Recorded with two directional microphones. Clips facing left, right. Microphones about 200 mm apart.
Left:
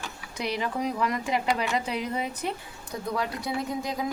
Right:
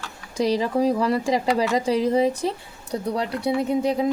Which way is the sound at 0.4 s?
35° right (ahead or behind).